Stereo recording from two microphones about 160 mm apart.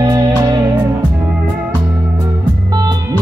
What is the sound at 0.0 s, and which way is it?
Music, 25° right (ahead or behind).